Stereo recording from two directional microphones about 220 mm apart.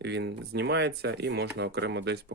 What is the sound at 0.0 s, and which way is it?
Speech, 50° right (ahead or behind).